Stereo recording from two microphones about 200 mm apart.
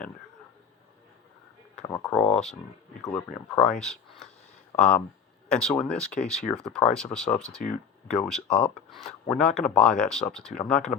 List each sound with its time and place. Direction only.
1.8 s speech: 15° left (ahead or behind)
7.6 s speech: 45° left (ahead or behind)
8.0 s speech: centre (ahead or behind)